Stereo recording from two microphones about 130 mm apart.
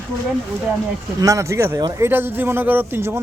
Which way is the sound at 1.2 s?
25° right (ahead or behind).